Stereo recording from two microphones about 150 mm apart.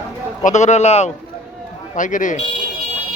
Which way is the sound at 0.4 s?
50° left (ahead or behind).